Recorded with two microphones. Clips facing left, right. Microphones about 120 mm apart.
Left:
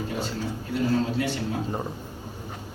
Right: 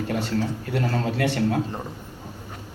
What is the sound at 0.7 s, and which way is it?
Speech, 70° right (ahead or behind).